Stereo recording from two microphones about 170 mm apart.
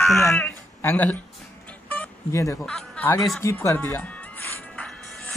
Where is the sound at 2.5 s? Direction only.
5° left (ahead or behind).